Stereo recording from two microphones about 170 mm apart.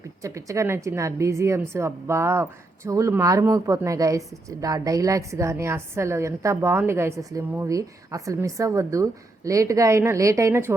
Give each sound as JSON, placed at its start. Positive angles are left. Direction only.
{"t": 0.2, "sound": "a woman's voice", "side_deg": -20}